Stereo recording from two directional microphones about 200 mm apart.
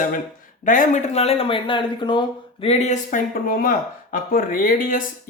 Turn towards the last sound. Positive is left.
turn(degrees=40)  # may be behind; listen again after turning